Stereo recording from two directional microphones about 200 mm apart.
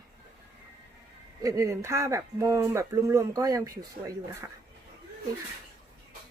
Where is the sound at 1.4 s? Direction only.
15° right (ahead or behind).